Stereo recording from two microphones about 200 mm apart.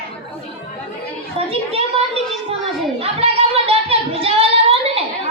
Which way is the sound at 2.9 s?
30° right (ahead or behind).